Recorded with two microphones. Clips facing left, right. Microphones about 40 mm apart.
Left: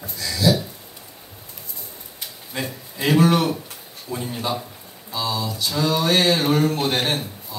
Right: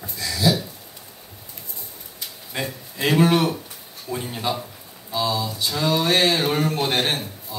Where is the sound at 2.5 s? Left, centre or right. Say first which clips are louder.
Even; right.